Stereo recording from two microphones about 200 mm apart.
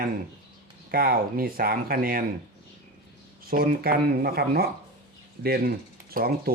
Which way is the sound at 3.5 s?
45° right (ahead or behind).